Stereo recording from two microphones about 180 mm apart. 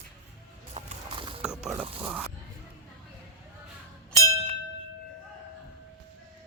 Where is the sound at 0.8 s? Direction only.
30° right (ahead or behind).